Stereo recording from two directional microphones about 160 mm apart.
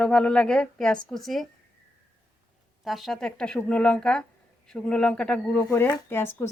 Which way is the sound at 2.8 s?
Centre (ahead or behind).